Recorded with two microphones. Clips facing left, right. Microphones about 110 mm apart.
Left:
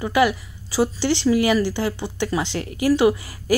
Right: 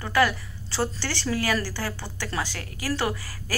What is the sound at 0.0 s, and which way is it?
A woman's voice, 15° left (ahead or behind).